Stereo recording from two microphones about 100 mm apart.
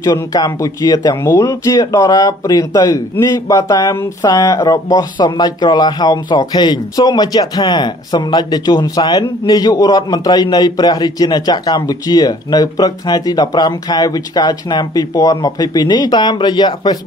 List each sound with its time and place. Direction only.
0.0 s speech: 40° left (ahead or behind)